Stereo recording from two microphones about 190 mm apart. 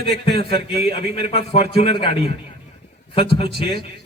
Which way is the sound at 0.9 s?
30° left (ahead or behind).